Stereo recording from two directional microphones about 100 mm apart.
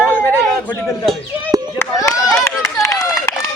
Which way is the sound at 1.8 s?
30° left (ahead or behind).